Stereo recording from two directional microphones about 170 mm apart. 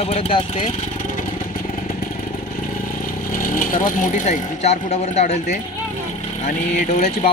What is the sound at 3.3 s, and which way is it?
Speech, 55° left (ahead or behind).